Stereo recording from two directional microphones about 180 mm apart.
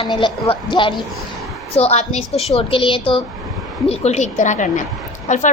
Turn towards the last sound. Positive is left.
turn(degrees=45)  # may be behind; listen again after turning